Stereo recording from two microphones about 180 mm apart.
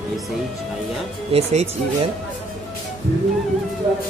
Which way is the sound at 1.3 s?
35° right (ahead or behind).